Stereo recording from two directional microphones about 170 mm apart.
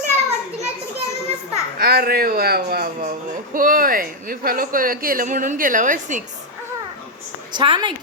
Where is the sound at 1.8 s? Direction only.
65° right (ahead or behind); by 6.2 s 50° right (ahead or behind).